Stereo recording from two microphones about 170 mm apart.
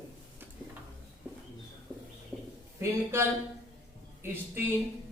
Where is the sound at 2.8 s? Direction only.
15° right (ahead or behind).